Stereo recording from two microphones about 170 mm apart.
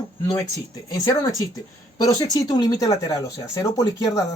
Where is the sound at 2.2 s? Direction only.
20° left (ahead or behind).